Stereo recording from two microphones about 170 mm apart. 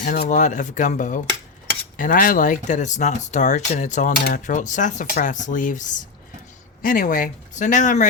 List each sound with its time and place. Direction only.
0.0 s speech: 50° left (ahead or behind)